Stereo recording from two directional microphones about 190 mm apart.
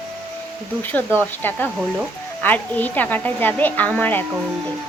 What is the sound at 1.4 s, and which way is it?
A woman's voice, 10° left (ahead or behind).